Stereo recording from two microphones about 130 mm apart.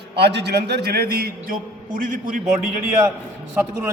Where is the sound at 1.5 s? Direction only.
90° right.